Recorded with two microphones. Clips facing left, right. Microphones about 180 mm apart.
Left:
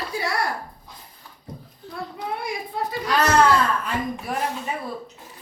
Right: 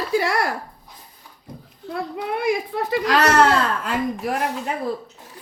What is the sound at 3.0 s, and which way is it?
Speech, 90° right.